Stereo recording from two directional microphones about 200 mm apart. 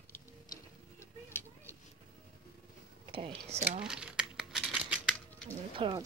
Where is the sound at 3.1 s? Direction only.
30° right (ahead or behind).